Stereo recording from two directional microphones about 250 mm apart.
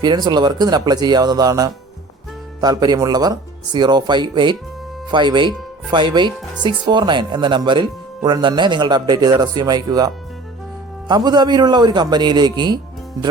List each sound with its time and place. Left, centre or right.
0.0 s speech: centre
11.1 s speech: centre